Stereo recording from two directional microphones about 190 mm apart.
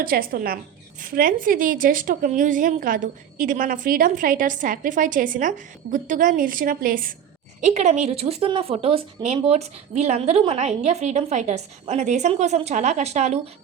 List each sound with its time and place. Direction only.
0.0 s a woman's voice: 50° right (ahead or behind)